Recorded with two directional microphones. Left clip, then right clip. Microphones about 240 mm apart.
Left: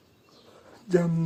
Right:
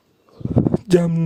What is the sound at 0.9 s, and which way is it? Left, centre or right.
Speech, right.